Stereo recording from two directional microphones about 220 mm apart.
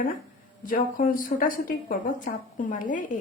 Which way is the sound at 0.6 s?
40° left (ahead or behind).